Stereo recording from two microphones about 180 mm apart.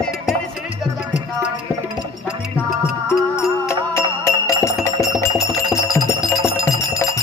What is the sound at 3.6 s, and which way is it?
Music, 15° left (ahead or behind).